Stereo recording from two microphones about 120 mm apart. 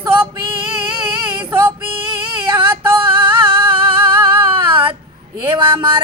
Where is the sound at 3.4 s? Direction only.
45° right (ahead or behind).